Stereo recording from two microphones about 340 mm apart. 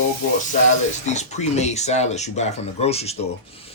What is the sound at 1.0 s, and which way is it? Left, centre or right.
Speech, centre.